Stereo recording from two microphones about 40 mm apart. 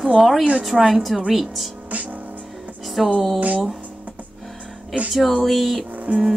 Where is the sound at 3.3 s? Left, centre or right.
Right.